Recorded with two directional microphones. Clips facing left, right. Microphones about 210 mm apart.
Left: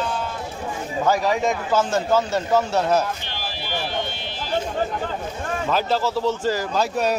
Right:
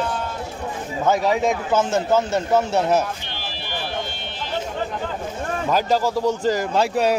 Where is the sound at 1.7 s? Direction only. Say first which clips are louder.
Even; 20° right (ahead or behind).